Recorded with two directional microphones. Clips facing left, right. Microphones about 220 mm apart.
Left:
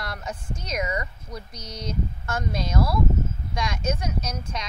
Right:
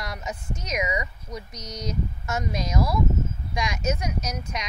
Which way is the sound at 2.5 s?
15° right (ahead or behind).